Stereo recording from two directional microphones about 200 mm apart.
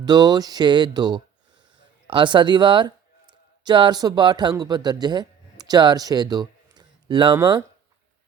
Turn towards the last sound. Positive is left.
turn(degrees=-20)  # may be behind; listen again after turning